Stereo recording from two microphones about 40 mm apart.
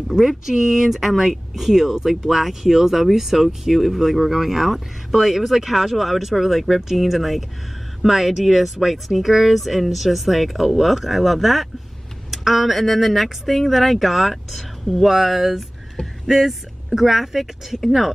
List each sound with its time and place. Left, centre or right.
0.1 s speech: centre